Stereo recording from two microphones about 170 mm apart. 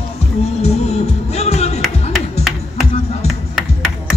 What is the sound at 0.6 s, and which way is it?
Music, 40° left (ahead or behind).